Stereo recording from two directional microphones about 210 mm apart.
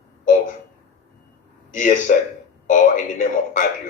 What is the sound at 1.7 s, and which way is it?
A man's voice, 40° left (ahead or behind).